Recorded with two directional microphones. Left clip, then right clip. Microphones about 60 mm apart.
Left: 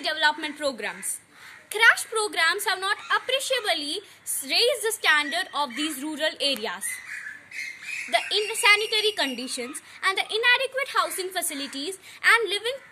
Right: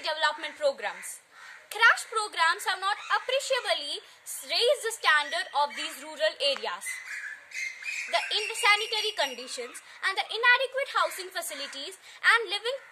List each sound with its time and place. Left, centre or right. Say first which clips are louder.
0.0 s a woman's voice: left 4 dB; right
8.1 s a woman's voice: left 5 dB; right